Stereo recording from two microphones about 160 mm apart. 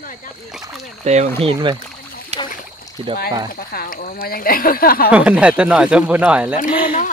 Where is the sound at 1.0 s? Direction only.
45° right (ahead or behind).